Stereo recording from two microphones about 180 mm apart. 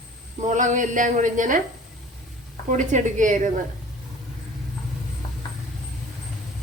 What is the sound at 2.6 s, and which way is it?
Speech, 45° right (ahead or behind).